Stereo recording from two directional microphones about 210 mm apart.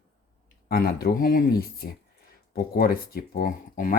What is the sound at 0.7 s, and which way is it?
Speech, 45° left (ahead or behind).